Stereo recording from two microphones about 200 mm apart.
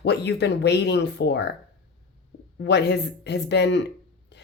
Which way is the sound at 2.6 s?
60° left (ahead or behind).